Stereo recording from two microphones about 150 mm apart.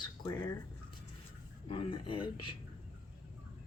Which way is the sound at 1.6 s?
35° left (ahead or behind).